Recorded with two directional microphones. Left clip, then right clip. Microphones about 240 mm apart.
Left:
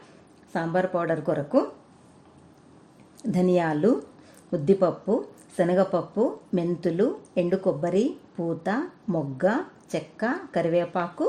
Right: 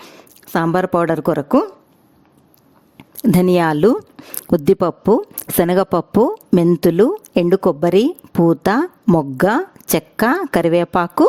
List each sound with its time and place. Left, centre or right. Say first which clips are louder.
0.5 s a woman's voice: right 9 dB; right
3.2 s a woman's voice: right 9 dB; right